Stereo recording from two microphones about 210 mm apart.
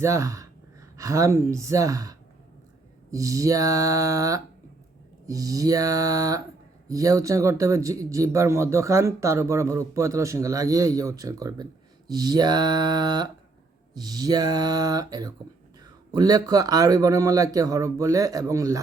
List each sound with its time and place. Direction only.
0.0 s speech: 15° right (ahead or behind)